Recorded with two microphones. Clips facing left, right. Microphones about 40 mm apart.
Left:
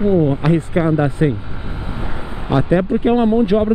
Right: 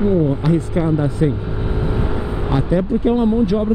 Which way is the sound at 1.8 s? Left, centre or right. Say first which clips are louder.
Right 5 dB; centre.